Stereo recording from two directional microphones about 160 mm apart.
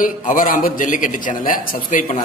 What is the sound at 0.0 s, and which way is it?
A man's voice, 60° left (ahead or behind).